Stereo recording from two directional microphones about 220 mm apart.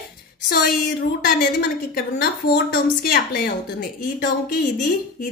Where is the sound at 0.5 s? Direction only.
40° left (ahead or behind).